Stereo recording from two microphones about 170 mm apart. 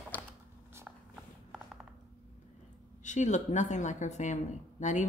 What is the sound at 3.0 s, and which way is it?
Speech, 45° left (ahead or behind).